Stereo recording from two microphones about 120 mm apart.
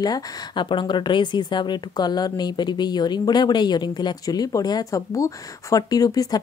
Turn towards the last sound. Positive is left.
turn(degrees=30)  # may be behind; listen again after turning